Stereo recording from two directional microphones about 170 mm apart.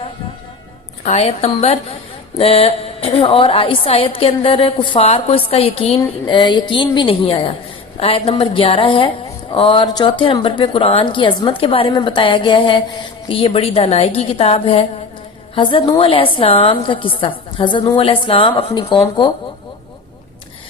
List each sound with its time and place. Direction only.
1.0 s a woman's voice: 40° left (ahead or behind)